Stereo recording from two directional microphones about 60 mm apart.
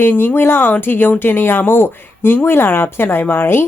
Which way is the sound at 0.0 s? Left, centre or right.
Left.